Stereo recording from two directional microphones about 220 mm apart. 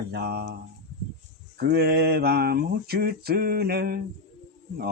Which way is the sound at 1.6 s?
45° right (ahead or behind).